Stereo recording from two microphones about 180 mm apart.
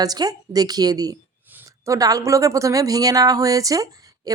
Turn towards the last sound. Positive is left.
turn(degrees=-20)  # may be behind; listen again after turning